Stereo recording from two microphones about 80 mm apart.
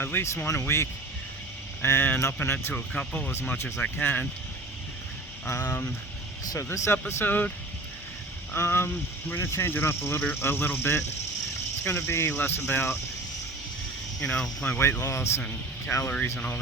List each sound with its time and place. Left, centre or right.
0.0 s speech: left
5.5 s speech: left
8.5 s speech: left
14.2 s speech: centre
15.0 s speech: left